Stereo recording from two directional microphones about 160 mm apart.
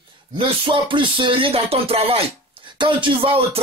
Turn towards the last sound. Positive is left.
turn(degrees=-30)  # may be behind; listen again after turning